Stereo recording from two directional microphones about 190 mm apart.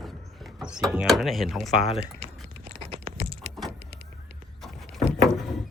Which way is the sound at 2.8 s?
30° right (ahead or behind).